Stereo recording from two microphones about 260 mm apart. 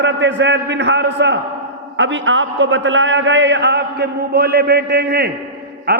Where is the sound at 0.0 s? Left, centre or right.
Right.